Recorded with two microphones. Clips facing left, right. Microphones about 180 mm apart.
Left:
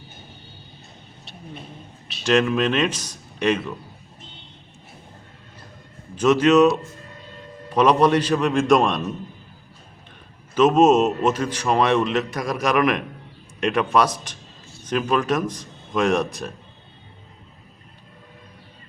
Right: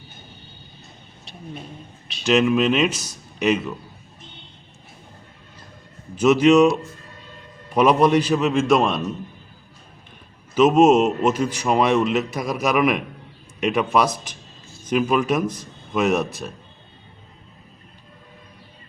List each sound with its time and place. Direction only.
2.2 s speech: 10° right (ahead or behind)
6.1 s a man's voice: 10° right (ahead or behind)
10.5 s a man's voice: 10° right (ahead or behind)